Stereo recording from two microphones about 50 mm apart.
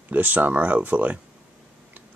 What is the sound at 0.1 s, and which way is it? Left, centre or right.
Speech, right.